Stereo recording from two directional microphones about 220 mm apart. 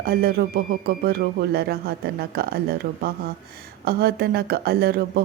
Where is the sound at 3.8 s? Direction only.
45° right (ahead or behind).